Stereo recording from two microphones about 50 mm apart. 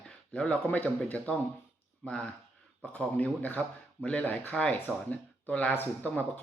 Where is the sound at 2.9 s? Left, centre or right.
Left.